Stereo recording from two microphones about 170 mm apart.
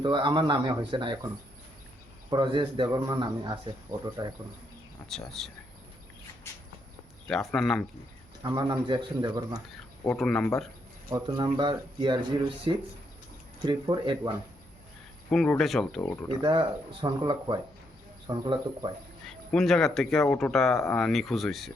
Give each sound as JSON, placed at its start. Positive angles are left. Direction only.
{"t": 0.0, "sound": "speech", "side_deg": -25}
{"t": 2.3, "sound": "speech", "side_deg": -25}
{"t": 5.0, "sound": "speech", "side_deg": 0}
{"t": 7.3, "sound": "speech", "side_deg": 0}
{"t": 8.4, "sound": "speech", "side_deg": -25}
{"t": 10.1, "sound": "speech", "side_deg": 5}
{"t": 11.1, "sound": "speech", "side_deg": -15}
{"t": 15.3, "sound": "speech", "side_deg": 0}
{"t": 16.4, "sound": "speech", "side_deg": -30}
{"t": 19.3, "sound": "speech", "side_deg": 5}